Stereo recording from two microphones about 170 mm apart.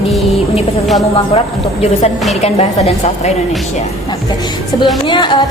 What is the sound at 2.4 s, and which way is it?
Speech, 40° left (ahead or behind).